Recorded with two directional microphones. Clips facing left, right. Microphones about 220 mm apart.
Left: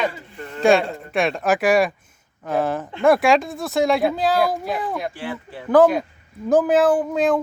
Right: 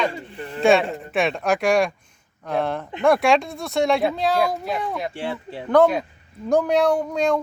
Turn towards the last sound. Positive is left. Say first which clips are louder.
# left 2 dB
turn(degrees=0)  # may be behind; listen again after turning